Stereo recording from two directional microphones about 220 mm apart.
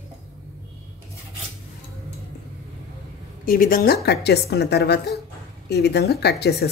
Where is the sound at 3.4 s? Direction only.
40° left (ahead or behind).